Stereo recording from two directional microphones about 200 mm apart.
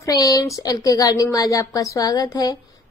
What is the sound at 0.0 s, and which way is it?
A woman's voice, 15° left (ahead or behind).